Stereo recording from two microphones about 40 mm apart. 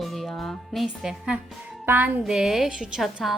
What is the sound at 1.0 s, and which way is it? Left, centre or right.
Speech, centre.